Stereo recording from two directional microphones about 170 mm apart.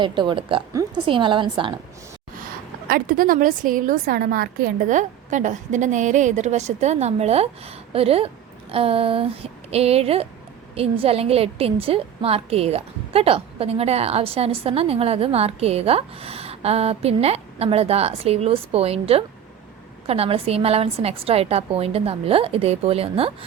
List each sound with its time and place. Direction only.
0.0 s a woman's voice: 25° right (ahead or behind)
2.8 s a woman's voice: 55° right (ahead or behind); by 23.3 s 35° right (ahead or behind)